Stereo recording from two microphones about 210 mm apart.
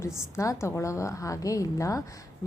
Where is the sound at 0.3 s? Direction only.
15° left (ahead or behind).